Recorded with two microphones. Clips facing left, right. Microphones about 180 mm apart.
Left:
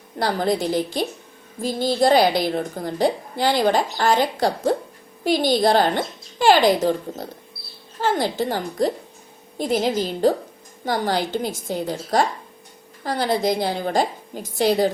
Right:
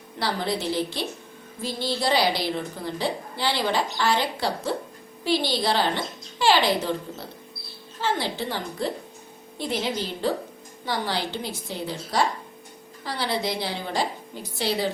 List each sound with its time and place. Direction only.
0.2 s a woman's voice: 45° left (ahead or behind)